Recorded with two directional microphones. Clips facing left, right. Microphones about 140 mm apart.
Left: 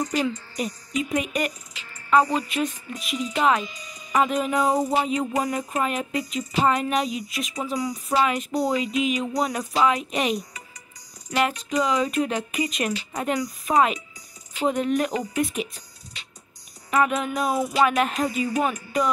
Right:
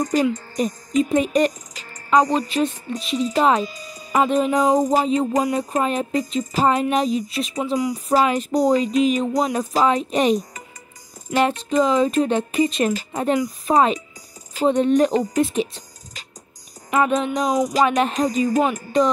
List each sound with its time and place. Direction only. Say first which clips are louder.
0.0 s speech: right 5 dB; 45° right (ahead or behind)
7.6 s speech: right 5 dB; 20° right (ahead or behind)
7.9 s speech: right 3 dB; 40° right (ahead or behind)
9.4 s speech: right 4 dB; 25° right (ahead or behind)
9.8 s speech: right 3 dB; 35° right (ahead or behind)
11.3 s speech: right 5 dB; 30° right (ahead or behind)
17.3 s music: right 4 dB; 20° right (ahead or behind)
17.8 s speech: right 3 dB; 25° right (ahead or behind)
18.1 s speech: right 5 dB; 40° right (ahead or behind)